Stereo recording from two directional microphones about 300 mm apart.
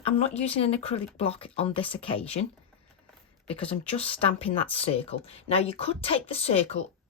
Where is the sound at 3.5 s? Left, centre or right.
Centre.